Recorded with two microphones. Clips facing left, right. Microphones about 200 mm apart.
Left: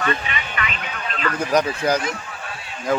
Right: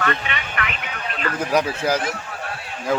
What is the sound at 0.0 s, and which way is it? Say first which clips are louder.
Vehicle: even; 60° right (ahead or behind).